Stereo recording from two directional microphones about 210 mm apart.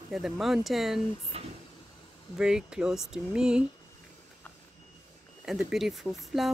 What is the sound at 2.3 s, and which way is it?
Speech, 5° right (ahead or behind).